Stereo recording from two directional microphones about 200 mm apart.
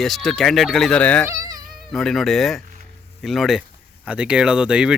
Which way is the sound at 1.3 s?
15° right (ahead or behind).